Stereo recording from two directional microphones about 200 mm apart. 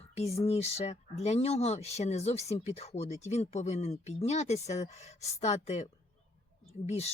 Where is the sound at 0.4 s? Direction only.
30° left (ahead or behind).